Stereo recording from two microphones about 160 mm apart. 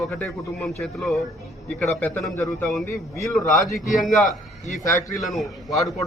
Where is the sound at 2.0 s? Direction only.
10° left (ahead or behind).